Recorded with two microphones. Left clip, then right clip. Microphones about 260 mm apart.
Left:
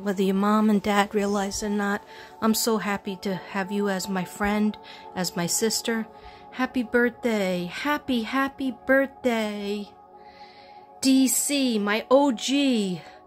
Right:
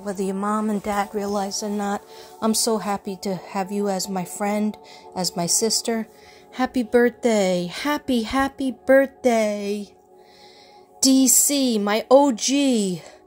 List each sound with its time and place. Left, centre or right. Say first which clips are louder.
0.0 s speech: left 1 dB; left
2.8 s a woman's voice: right 2 dB; centre
6.5 s speech: right 4 dB; centre
11.0 s speech: right 4 dB; centre